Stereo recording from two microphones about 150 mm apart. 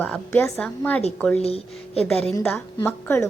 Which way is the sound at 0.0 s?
10° left (ahead or behind).